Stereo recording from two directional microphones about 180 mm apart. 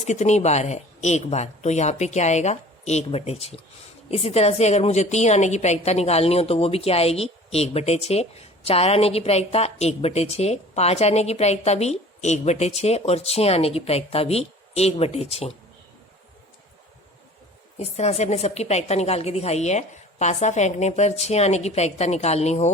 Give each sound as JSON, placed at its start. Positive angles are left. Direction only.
{"t": 0.0, "sound": "a woman's voice", "side_deg": 40}
{"t": 17.7, "sound": "a woman's voice", "side_deg": 35}